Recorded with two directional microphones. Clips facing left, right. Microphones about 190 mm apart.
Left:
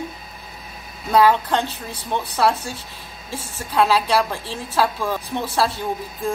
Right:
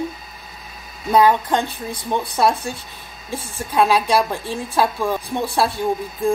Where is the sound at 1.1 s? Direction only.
15° right (ahead or behind).